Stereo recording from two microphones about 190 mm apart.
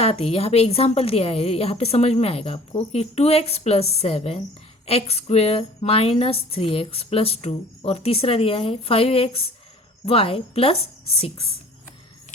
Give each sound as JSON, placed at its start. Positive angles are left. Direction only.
{"t": 0.0, "sound": "a woman's voice", "side_deg": 30}